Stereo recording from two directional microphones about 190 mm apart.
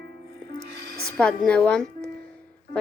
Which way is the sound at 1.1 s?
5° left (ahead or behind).